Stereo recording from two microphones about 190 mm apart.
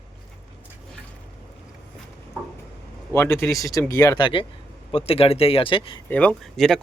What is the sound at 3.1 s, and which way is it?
Speech, 15° left (ahead or behind).